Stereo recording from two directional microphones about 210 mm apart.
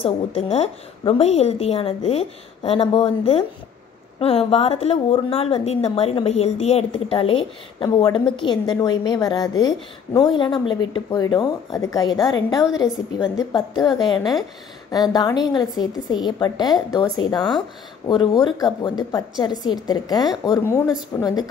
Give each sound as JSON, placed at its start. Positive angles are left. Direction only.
{"t": 0.0, "sound": "a woman's voice", "side_deg": 25}
{"t": 12.8, "sound": "a woman's voice", "side_deg": -5}
{"t": 13.4, "sound": "a woman's voice", "side_deg": 20}